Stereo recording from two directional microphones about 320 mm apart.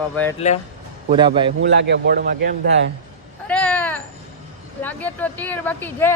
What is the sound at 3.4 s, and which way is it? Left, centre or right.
Cat, centre.